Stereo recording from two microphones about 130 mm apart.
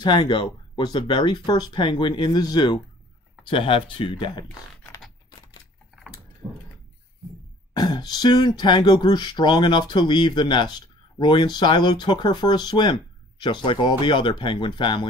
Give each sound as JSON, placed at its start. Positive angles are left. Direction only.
{"t": 0.0, "sound": "speech", "side_deg": 40}
{"t": 3.4, "sound": "speech", "side_deg": 40}
{"t": 6.4, "sound": "mechanisms", "side_deg": -15}
{"t": 7.7, "sound": "speech", "side_deg": 35}